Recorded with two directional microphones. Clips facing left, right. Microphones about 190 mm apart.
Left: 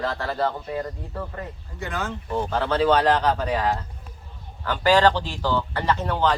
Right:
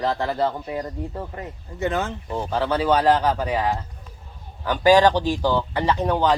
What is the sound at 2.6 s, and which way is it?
A man's voice, 10° right (ahead or behind).